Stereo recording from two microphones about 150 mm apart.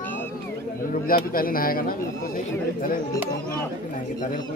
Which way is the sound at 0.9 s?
75° left (ahead or behind).